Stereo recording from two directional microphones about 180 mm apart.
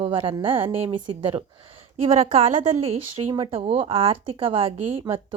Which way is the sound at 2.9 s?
30° right (ahead or behind).